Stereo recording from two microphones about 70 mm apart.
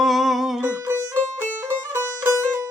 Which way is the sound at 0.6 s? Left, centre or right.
Right.